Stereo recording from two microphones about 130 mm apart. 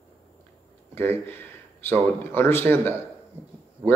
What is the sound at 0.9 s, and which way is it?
Speech, 20° left (ahead or behind).